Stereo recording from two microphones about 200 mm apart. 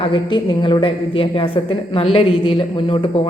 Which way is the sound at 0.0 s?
25° left (ahead or behind).